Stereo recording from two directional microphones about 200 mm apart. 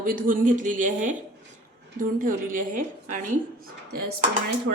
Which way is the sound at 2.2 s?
45° right (ahead or behind).